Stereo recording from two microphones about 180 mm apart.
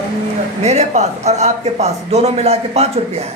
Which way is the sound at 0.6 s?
40° right (ahead or behind).